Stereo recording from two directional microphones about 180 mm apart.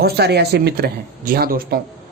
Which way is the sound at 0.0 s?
65° right (ahead or behind).